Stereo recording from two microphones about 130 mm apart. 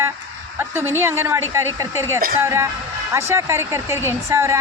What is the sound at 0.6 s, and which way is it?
Speech, 15° right (ahead or behind).